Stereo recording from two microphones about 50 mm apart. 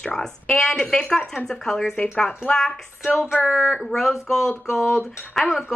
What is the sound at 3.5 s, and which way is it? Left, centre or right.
A woman's voice, centre.